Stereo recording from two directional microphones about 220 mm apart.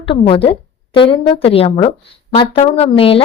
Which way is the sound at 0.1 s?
25° left (ahead or behind).